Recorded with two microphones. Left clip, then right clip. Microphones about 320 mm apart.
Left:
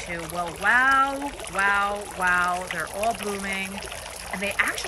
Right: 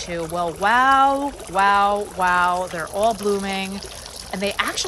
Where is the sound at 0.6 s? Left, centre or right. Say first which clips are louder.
Right 4 dB; centre.